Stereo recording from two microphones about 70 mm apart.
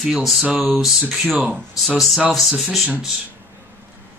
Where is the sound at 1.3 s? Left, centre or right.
Right.